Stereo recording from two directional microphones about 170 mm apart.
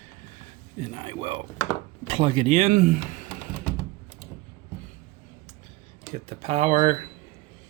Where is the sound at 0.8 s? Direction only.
30° right (ahead or behind); by 3.3 s 50° right (ahead or behind).